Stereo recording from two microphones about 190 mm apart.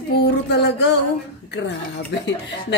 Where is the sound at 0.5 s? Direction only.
65° left (ahead or behind).